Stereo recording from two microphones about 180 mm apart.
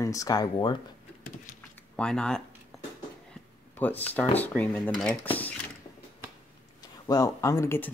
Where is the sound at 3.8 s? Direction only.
10° left (ahead or behind).